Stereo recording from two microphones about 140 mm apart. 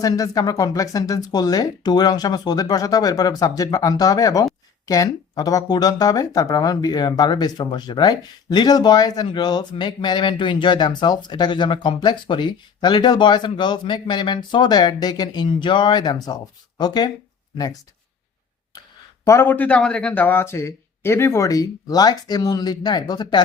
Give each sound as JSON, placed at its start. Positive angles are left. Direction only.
{"t": 0.0, "sound": "speech", "side_deg": 25}
{"t": 19.2, "sound": "speech", "side_deg": 20}